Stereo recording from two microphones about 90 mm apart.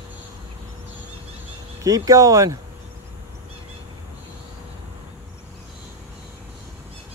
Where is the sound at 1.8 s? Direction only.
40° right (ahead or behind).